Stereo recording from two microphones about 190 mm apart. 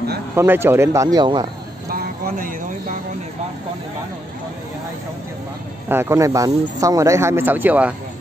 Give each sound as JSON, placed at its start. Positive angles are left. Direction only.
{"t": 0.4, "sound": "speech", "side_deg": -10}
{"t": 1.9, "sound": "a sound", "side_deg": -50}
{"t": 5.9, "sound": "speech", "side_deg": -10}